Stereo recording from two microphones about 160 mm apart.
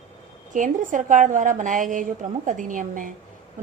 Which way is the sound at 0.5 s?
55° right (ahead or behind).